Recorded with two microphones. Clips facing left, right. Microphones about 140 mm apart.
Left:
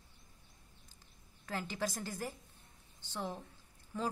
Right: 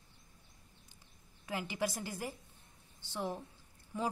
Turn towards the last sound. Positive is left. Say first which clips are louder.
# right 1 dB
turn(degrees=-15)  # may be behind; listen again after turning